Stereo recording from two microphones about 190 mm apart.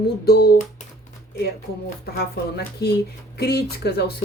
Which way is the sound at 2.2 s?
60° left (ahead or behind).